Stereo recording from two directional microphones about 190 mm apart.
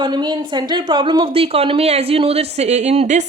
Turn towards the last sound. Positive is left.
turn(degrees=-35)  # may be behind; listen again after turning